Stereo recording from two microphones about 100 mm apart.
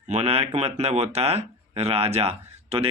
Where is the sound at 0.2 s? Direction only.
90° right.